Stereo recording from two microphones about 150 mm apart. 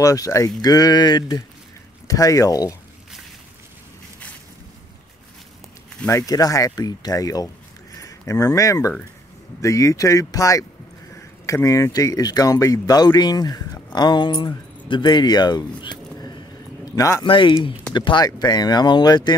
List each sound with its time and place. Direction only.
0.0 s speech: 20° left (ahead or behind)
6.0 s speech: 20° left (ahead or behind)
16.8 s a sound: 20° left (ahead or behind)
17.2 s speech: 35° left (ahead or behind)